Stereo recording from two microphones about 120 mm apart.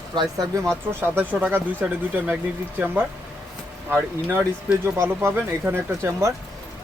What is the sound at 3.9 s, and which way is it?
Speech, 15° right (ahead or behind).